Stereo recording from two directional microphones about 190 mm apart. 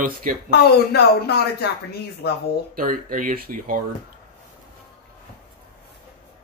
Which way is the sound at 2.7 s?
45° right (ahead or behind).